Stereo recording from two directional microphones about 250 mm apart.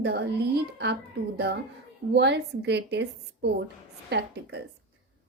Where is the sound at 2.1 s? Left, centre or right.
Right.